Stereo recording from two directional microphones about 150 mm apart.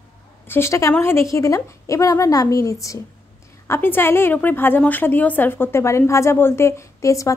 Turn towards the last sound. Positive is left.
turn(degrees=20)  # may be behind; listen again after turning